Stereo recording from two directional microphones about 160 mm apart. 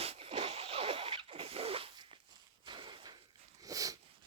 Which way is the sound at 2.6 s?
30° right (ahead or behind).